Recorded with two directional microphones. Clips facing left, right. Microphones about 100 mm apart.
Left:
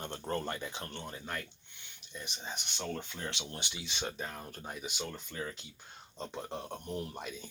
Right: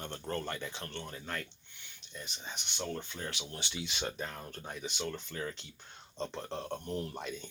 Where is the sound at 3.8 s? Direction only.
Centre (ahead or behind).